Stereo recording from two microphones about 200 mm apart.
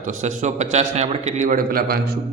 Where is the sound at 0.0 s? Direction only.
40° right (ahead or behind).